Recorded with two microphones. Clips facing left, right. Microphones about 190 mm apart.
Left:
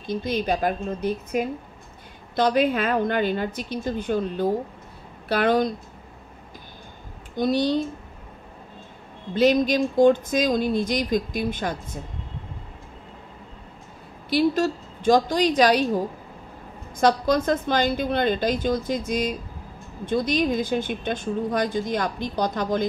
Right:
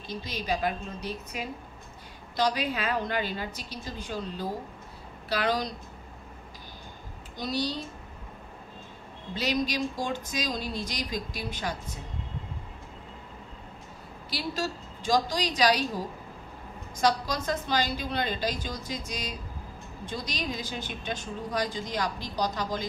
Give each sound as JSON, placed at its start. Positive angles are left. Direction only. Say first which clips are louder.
{"t": 0.0, "sound": "speech", "louder": "left 10 dB", "side_deg": 55}
{"t": 7.3, "sound": "speech", "louder": "left 10 dB", "side_deg": 55}
{"t": 9.3, "sound": "speech", "louder": "left 10 dB", "side_deg": 50}
{"t": 14.3, "sound": "speech", "louder": "left 12 dB", "side_deg": 55}
{"t": 17.0, "sound": "speech", "louder": "left 7 dB", "side_deg": 55}